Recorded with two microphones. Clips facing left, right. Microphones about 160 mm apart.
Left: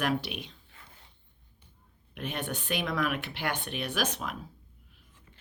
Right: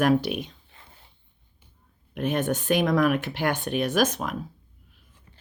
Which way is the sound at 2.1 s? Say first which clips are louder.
Right 10 dB; 45° right (ahead or behind).